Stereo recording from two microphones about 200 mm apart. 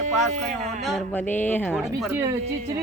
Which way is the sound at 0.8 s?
Centre (ahead or behind).